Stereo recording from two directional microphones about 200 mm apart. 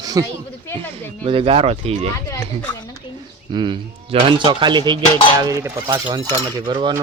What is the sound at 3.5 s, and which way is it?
A man's voice, 25° right (ahead or behind).